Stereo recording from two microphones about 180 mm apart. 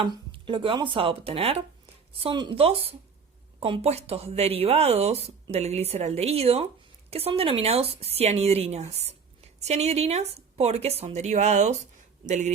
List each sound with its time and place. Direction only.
0.0 s speech: 30° right (ahead or behind)